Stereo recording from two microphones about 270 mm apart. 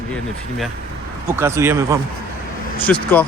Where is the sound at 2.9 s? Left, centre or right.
Centre.